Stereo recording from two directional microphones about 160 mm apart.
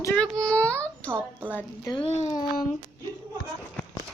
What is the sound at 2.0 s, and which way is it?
Speech, 40° left (ahead or behind).